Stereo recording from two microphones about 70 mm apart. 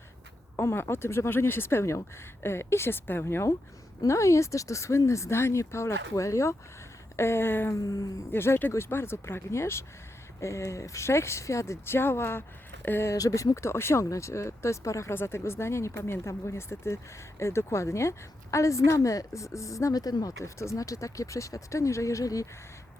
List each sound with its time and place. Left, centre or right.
0.5 s a woman's voice: left
7.9 s speech: left
8.3 s speech: left
13.1 s a woman's voice: left
15.1 s a woman's voice: left
20.4 s a woman's voice: left